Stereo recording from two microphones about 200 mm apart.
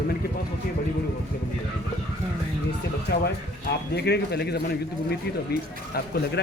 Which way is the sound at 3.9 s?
55° left (ahead or behind).